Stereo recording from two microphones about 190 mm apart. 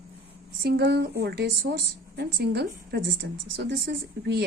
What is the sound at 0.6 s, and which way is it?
A woman's voice, 60° right (ahead or behind).